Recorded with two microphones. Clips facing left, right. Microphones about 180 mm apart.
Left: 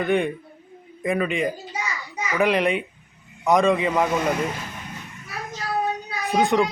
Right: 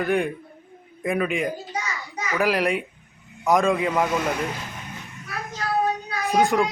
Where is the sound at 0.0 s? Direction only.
Centre (ahead or behind).